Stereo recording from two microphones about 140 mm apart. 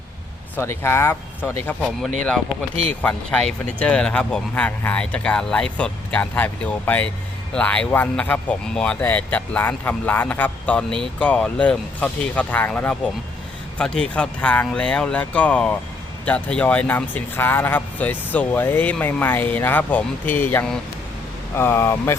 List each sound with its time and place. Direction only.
0.5 s speech: 15° left (ahead or behind)